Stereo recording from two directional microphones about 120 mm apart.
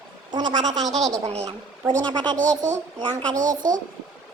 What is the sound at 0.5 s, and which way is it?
Speech, 80° right.